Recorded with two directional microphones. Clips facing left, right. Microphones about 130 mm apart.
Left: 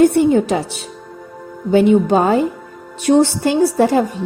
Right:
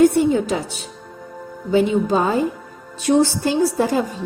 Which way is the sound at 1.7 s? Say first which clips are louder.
Left 5 dB; 65° left (ahead or behind).